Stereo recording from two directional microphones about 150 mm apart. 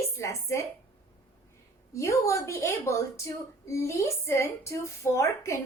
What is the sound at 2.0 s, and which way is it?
A woman's voice, 20° left (ahead or behind).